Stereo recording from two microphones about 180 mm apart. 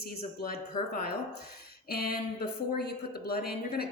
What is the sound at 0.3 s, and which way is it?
A woman's voice, 60° left (ahead or behind).